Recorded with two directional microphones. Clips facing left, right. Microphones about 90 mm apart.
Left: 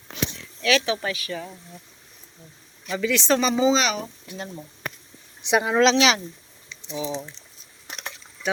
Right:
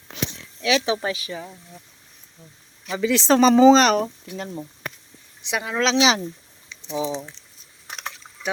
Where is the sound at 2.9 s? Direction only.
20° right (ahead or behind).